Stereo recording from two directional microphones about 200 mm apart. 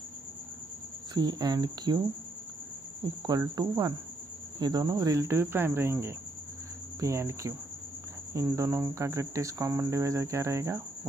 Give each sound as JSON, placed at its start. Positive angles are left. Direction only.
{"t": 1.1, "sound": "speech", "side_deg": -20}
{"t": 3.2, "sound": "speech", "side_deg": -20}